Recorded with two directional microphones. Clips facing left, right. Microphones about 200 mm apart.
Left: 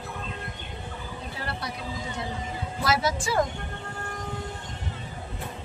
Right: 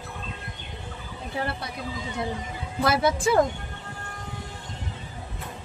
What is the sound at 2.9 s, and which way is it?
Speech, 60° right (ahead or behind).